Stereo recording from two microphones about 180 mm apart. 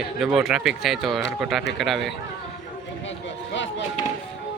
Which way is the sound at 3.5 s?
90° left.